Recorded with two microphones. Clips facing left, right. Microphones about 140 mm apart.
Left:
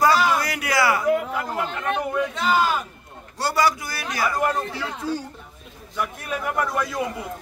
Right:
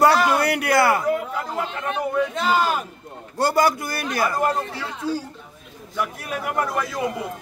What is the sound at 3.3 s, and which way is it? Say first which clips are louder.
Speech: right 3 dB; 50° right (ahead or behind).